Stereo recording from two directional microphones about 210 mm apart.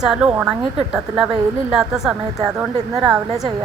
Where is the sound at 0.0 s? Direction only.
5° right (ahead or behind).